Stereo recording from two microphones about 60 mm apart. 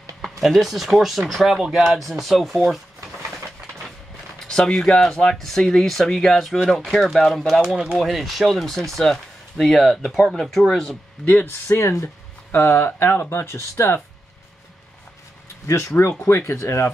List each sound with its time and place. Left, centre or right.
0.2 s speech: centre
4.5 s speech: centre
11.2 s speech: left
11.8 s speech: left
12.4 s speech: left
15.6 s speech: left